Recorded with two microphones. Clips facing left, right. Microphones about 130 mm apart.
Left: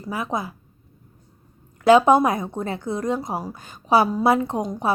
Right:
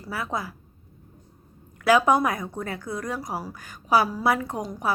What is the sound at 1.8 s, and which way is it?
A woman's voice, 25° left (ahead or behind).